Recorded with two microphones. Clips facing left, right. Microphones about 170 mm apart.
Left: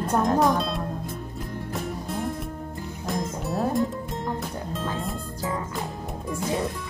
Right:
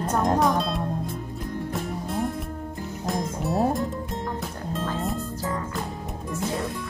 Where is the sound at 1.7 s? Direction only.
Centre (ahead or behind).